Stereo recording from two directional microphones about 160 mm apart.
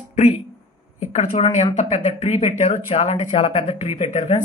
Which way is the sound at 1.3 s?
45° left (ahead or behind).